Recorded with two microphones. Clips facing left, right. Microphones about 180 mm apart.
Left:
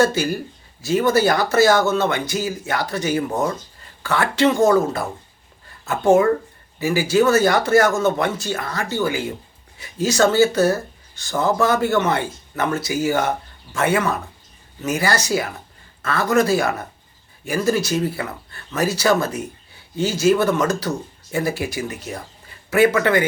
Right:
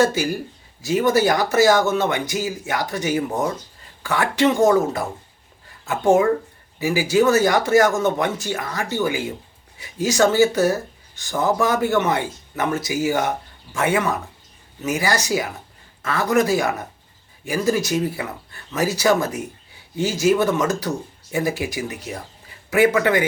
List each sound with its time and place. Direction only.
0.0 s speech: 15° right (ahead or behind)
16.0 s a sound: 15° right (ahead or behind)
16.3 s speech: 15° right (ahead or behind)